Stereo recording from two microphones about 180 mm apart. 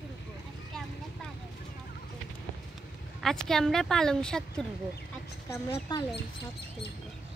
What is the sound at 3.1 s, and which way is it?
Speech, centre (ahead or behind).